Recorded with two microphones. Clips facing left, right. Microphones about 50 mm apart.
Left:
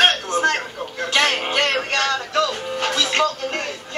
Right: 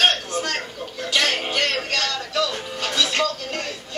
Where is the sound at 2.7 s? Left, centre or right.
Centre.